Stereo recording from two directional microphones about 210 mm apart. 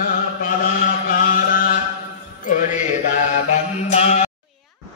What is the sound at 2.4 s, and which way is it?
Music, 40° left (ahead or behind).